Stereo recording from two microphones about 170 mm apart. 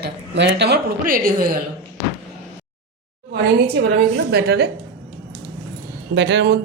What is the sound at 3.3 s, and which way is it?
A woman's voice, 70° right (ahead or behind).